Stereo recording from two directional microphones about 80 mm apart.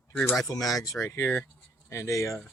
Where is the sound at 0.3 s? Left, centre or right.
Left.